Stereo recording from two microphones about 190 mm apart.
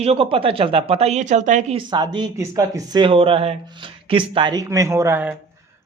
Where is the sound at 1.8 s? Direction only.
25° right (ahead or behind).